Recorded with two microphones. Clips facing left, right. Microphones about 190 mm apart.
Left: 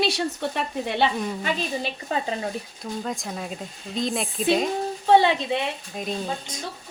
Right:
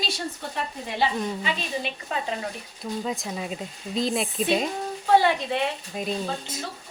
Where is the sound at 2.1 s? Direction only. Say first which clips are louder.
Left 4 dB; 35° left (ahead or behind).